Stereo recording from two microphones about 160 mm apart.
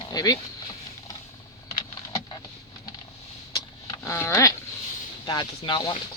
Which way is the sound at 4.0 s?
15° left (ahead or behind).